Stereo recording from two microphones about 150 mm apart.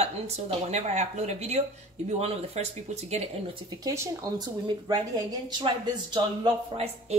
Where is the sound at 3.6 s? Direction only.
20° right (ahead or behind); by 7.2 s 40° right (ahead or behind).